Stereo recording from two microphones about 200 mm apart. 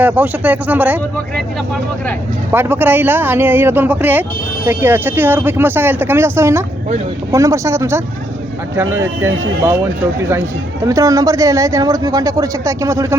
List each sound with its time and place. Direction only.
0.0 s speech: 10° right (ahead or behind)
2.5 s speech: 10° right (ahead or behind)